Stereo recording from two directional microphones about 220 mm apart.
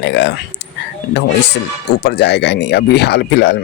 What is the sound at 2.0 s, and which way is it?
Speech, 50° left (ahead or behind).